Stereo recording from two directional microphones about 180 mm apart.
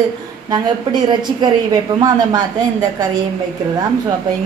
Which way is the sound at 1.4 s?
20° right (ahead or behind).